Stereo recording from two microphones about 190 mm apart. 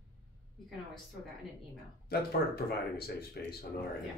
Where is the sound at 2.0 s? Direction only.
55° left (ahead or behind).